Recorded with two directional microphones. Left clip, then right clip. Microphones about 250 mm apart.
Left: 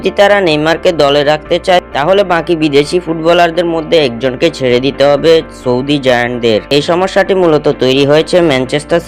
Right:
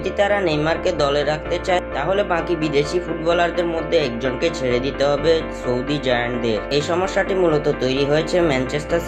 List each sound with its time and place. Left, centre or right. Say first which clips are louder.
0.0 s speech: left 11 dB; left